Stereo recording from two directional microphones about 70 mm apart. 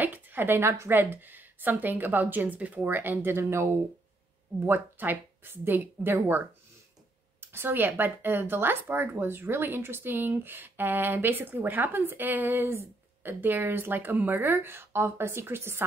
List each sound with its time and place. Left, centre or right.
0.0 s a woman's voice: right
4.6 s a woman's voice: right